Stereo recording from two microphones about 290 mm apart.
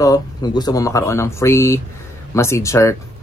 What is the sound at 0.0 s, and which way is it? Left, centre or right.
Speech, centre.